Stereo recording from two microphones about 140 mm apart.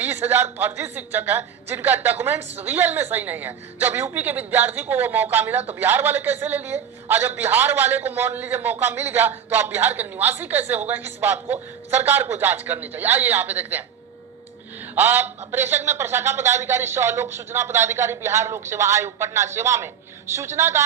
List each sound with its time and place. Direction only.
0.0 s a sound: 15° right (ahead or behind)
0.6 s a woman's voice: 15° right (ahead or behind)
14.9 s a woman's voice: 15° right (ahead or behind)